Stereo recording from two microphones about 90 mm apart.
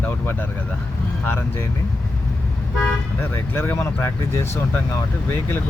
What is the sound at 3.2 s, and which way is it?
Speech, 25° left (ahead or behind).